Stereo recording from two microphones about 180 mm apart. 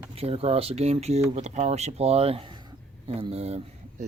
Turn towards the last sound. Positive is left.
turn(degrees=-35)  # may be behind; listen again after turning